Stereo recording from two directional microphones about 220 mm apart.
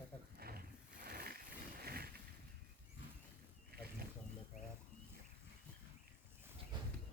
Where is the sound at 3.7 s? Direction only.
45° right (ahead or behind).